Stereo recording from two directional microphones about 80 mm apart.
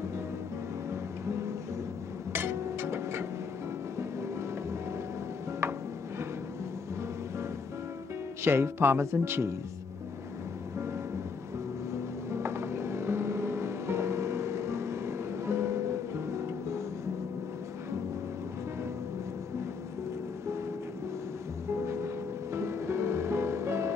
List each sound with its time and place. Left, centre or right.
2.3 s music: right
5.6 s a sound: right
8.5 s speech: right
12.3 s music: right
21.8 s music: right